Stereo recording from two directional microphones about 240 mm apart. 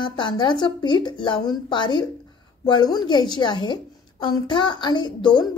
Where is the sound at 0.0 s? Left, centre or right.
Centre.